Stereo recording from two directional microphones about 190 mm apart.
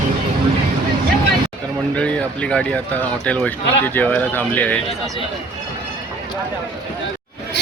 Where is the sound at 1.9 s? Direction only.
5° left (ahead or behind).